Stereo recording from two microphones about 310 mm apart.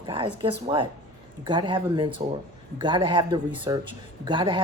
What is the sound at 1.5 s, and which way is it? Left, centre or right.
Speech, centre.